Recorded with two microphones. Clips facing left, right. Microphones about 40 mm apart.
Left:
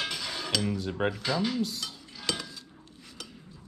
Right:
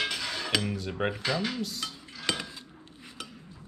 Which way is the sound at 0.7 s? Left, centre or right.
Centre.